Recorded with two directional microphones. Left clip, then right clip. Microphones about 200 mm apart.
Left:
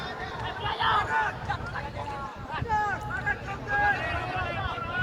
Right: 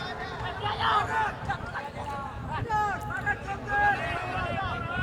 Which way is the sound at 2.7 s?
35° right (ahead or behind).